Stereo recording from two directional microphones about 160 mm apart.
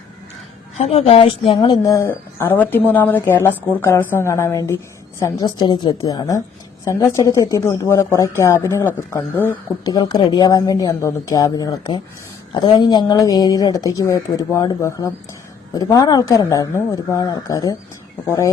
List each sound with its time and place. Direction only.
0.8 s a woman's voice: 40° left (ahead or behind)
1.5 s a woman's voice: 25° left (ahead or behind)
9.8 s speech: 25° left (ahead or behind)